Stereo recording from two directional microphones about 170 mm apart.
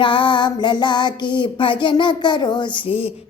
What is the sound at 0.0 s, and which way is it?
Female singing, 30° left (ahead or behind).